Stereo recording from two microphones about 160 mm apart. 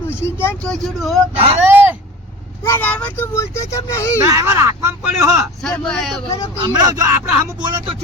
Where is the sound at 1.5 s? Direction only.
15° right (ahead or behind).